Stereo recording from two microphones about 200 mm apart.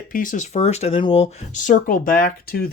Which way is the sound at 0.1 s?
40° left (ahead or behind).